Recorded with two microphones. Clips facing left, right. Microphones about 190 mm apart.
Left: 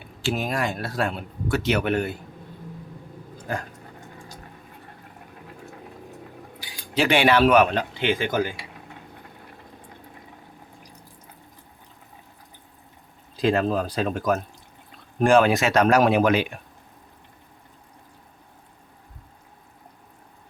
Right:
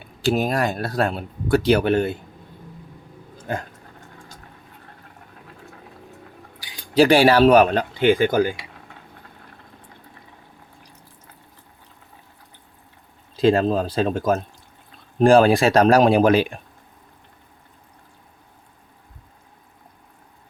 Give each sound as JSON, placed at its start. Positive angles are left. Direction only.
{"t": 0.2, "sound": "speech", "side_deg": -40}
{"t": 6.9, "sound": "speech", "side_deg": -35}
{"t": 13.3, "sound": "speech", "side_deg": -25}